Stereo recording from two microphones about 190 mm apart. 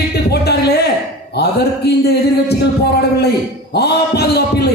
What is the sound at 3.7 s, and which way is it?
Speech, 60° left (ahead or behind).